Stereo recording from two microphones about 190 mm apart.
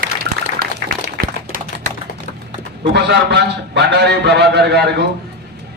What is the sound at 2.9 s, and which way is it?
A man's voice, 65° right (ahead or behind).